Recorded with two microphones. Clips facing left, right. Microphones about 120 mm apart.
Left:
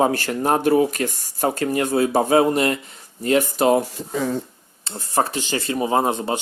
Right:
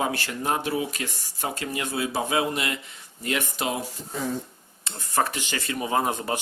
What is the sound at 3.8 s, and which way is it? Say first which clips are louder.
Speech: left 8 dB; 90° left.